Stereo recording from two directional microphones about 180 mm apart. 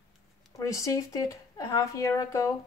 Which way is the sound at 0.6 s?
20° left (ahead or behind).